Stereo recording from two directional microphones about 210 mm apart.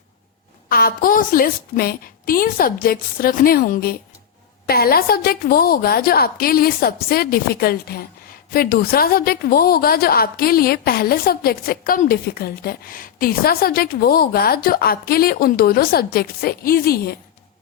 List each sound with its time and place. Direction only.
0.7 s a woman's voice: 45° left (ahead or behind)